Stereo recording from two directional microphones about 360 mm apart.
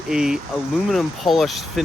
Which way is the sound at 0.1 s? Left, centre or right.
Centre.